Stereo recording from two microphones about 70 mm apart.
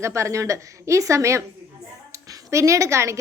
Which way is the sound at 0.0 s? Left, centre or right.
Right.